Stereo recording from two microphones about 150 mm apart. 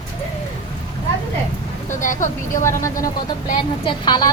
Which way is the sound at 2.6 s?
20° left (ahead or behind).